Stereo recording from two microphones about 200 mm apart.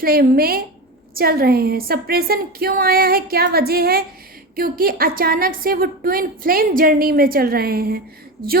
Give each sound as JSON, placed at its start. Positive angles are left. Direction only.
{"t": 0.0, "sound": "a woman's voice", "side_deg": -50}